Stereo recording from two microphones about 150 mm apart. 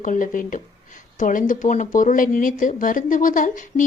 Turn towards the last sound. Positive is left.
turn(degrees=60)  # may be behind; listen again after turning